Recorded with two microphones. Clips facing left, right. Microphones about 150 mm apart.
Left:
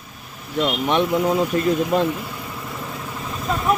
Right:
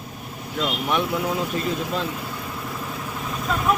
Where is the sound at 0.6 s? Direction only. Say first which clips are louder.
Left 4 dB; 25° left (ahead or behind).